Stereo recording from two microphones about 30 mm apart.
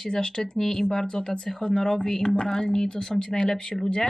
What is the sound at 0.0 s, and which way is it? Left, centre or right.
Speech, left.